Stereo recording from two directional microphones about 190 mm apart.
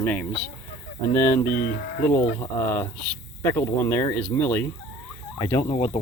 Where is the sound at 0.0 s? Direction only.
10° left (ahead or behind).